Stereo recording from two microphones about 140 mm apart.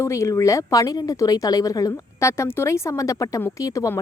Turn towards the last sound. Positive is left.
turn(degrees=20)  # may be behind; listen again after turning